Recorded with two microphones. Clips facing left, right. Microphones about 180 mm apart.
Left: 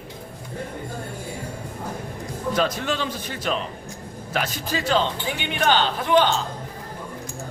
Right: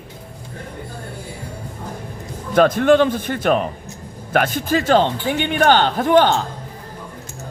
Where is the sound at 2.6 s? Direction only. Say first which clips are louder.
Right 13 dB; 55° right (ahead or behind).